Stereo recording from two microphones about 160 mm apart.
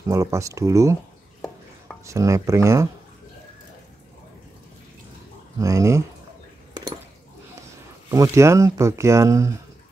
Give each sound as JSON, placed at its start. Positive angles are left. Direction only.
{"t": 0.0, "sound": "speech", "side_deg": -20}
{"t": 2.0, "sound": "speech", "side_deg": -20}
{"t": 5.6, "sound": "speech", "side_deg": -20}
{"t": 8.1, "sound": "speech", "side_deg": -20}